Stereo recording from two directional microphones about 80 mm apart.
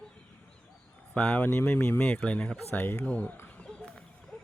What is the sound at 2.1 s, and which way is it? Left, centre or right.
Speech, centre.